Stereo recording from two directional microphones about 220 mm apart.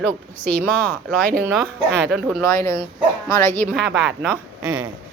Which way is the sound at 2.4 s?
10° left (ahead or behind).